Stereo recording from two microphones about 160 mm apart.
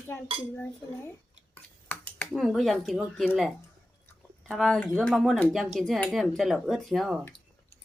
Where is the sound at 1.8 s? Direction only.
10° left (ahead or behind).